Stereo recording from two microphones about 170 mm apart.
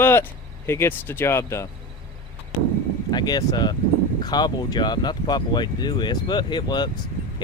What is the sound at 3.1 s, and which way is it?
Speech, 25° left (ahead or behind).